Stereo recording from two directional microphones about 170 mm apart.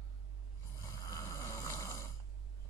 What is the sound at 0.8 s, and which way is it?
Snoring, 20° left (ahead or behind).